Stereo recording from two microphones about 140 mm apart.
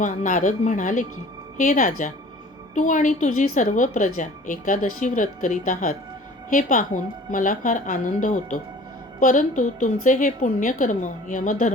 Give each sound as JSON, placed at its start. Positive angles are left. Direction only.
{"t": 0.0, "sound": "a woman's voice", "side_deg": 65}